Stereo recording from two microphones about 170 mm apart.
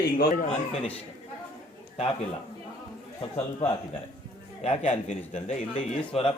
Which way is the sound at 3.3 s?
35° left (ahead or behind).